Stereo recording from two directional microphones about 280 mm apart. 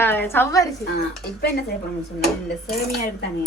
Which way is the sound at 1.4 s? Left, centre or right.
Left.